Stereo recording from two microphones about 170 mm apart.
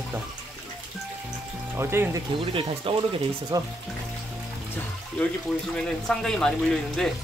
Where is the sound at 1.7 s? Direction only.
15° right (ahead or behind).